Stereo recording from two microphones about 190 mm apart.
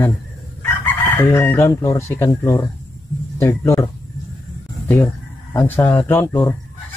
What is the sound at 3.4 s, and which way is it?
Fowl, 15° left (ahead or behind).